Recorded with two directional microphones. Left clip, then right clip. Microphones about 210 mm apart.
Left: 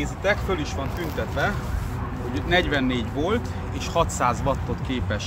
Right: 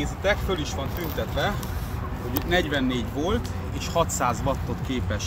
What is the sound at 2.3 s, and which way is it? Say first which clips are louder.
Speech: left 2 dB; 15° left (ahead or behind).